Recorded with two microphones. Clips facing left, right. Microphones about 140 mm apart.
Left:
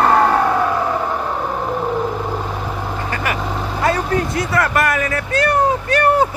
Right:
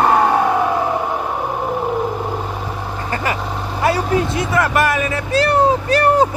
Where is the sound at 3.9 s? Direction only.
20° right (ahead or behind).